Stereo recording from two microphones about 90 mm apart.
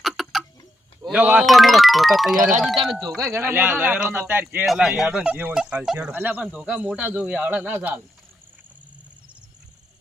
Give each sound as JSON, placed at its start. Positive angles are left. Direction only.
{"t": 0.0, "sound": "a sound", "side_deg": 0}
{"t": 1.1, "sound": "speech", "side_deg": -15}
{"t": 1.5, "sound": "speech", "side_deg": 0}
{"t": 3.2, "sound": "speech", "side_deg": -35}
{"t": 3.4, "sound": "a man's voice", "side_deg": -20}
{"t": 4.6, "sound": "speech", "side_deg": -5}
{"t": 6.1, "sound": "a man's voice", "side_deg": -20}
{"t": 6.4, "sound": "speech", "side_deg": -10}